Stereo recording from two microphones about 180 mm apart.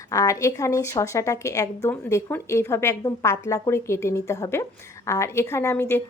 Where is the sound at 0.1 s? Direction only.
20° left (ahead or behind).